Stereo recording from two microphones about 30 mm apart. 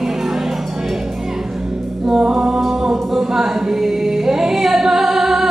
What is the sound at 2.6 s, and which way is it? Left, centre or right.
A capella, centre.